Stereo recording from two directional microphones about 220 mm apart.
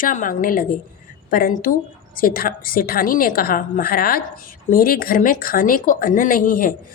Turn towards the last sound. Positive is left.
turn(degrees=40)  # may be behind; listen again after turning